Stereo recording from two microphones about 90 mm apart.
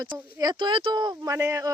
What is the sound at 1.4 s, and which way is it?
Speech, 35° right (ahead or behind).